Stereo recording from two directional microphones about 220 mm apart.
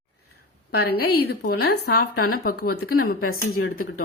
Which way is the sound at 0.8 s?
45° left (ahead or behind).